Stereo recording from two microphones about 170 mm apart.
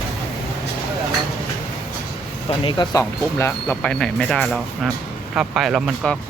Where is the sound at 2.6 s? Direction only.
25° left (ahead or behind).